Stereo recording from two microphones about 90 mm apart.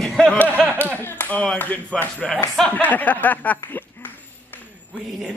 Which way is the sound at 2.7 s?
20° left (ahead or behind).